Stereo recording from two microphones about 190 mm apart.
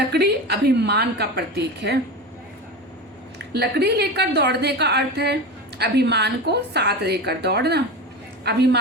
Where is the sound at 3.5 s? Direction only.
60° right (ahead or behind).